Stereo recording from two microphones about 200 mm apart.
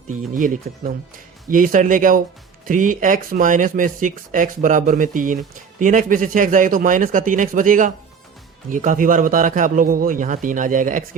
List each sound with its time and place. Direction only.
0.1 s speech: 40° right (ahead or behind)